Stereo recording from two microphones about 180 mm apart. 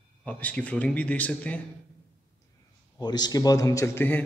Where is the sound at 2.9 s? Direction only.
20° left (ahead or behind).